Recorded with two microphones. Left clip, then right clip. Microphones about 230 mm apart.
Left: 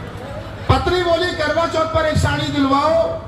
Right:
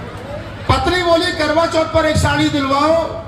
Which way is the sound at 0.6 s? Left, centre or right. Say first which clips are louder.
Right 2 dB; right.